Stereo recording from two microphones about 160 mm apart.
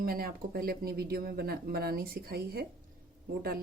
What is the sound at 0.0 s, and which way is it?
Speech, 70° right (ahead or behind).